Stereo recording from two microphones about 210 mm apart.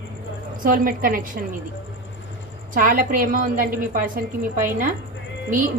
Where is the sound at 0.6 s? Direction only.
40° right (ahead or behind).